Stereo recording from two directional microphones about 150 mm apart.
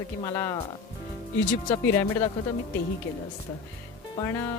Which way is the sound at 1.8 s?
15° left (ahead or behind).